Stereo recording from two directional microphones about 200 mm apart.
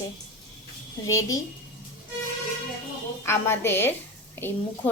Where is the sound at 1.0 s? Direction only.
15° left (ahead or behind).